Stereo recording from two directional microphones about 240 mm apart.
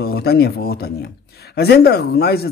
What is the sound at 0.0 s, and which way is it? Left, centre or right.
Speech, left.